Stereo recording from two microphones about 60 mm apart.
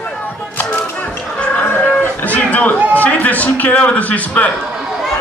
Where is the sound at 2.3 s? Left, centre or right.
Left.